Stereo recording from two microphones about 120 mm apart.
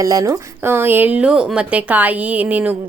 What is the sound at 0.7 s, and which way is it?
A woman's voice, 20° right (ahead or behind).